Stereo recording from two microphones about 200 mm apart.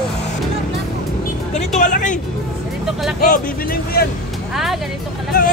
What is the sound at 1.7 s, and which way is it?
Speech, 40° left (ahead or behind).